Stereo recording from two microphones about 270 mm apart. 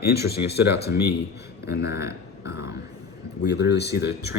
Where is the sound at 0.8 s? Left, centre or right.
Left.